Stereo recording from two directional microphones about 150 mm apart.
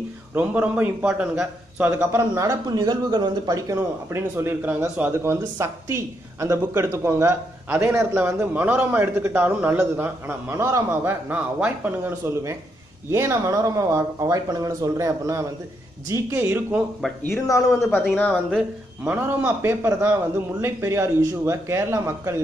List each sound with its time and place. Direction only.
0.3 s a man's voice: 10° right (ahead or behind)
17.2 s speech: 20° left (ahead or behind)
19.0 s a man's voice: 15° right (ahead or behind)